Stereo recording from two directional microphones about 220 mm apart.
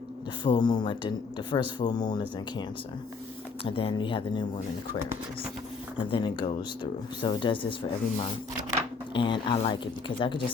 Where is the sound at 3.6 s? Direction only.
25° left (ahead or behind).